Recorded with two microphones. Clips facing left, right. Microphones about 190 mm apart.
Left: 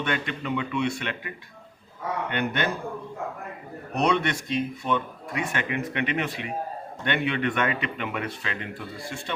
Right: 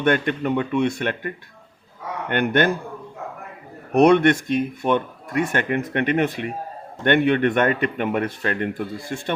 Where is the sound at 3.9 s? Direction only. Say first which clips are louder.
Right 10 dB; 55° right (ahead or behind).